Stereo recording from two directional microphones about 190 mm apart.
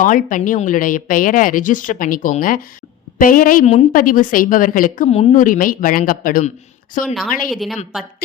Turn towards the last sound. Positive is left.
turn(degrees=0)  # may be behind; listen again after turning